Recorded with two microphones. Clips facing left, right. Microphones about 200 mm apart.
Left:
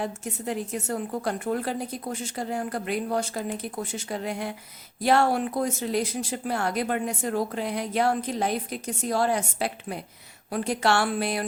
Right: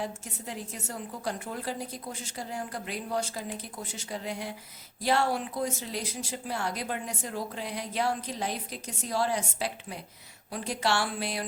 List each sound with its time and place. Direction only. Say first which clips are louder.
0.0 s speech: left 6 dB; 60° left (ahead or behind)